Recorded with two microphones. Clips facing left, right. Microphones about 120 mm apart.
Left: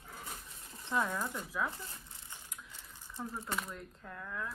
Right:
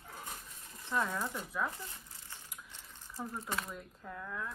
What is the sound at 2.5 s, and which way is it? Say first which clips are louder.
Mechanisms: even; centre (ahead or behind).